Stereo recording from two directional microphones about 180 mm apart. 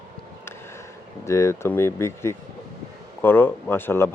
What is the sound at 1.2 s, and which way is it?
Speech, 15° left (ahead or behind).